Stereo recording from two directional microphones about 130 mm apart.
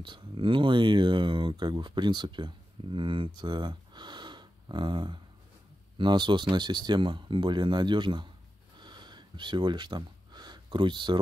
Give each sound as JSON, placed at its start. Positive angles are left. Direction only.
{"t": 0.0, "sound": "speech", "side_deg": -40}
{"t": 8.7, "sound": "sniff", "side_deg": -35}